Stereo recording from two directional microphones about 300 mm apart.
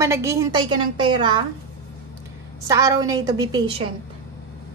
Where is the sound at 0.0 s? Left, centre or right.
Centre.